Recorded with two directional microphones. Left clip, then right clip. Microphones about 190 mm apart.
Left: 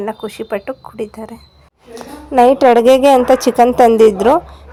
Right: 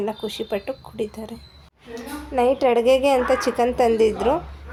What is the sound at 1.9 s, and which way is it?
A woman's voice, 45° left (ahead or behind).